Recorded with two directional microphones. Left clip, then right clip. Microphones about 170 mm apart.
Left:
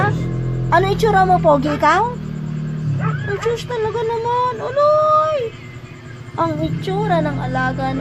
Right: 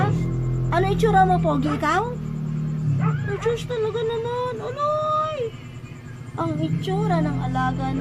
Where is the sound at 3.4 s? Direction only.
20° left (ahead or behind).